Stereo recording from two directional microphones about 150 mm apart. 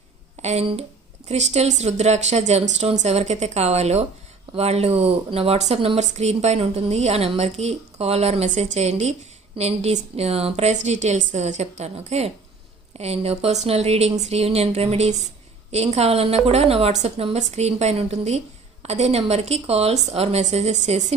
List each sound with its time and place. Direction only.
0.4 s speech: 40° right (ahead or behind)